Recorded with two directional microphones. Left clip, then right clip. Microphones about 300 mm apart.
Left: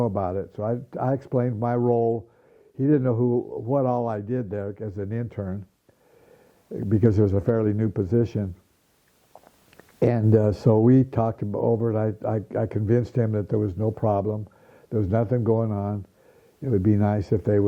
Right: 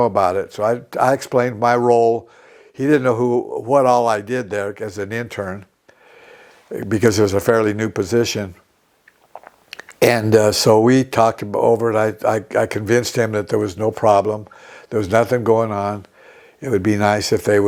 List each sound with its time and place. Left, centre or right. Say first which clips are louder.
0.0 s speech: right 10 dB; centre
2.0 s speech: right 9 dB; right
2.7 s speech: right 7 dB; centre
3.7 s speech: right 11 dB; centre
6.7 s speech: right 7 dB; centre
9.4 s a sound: right 15 dB; centre
10.8 s speech: right 7 dB; centre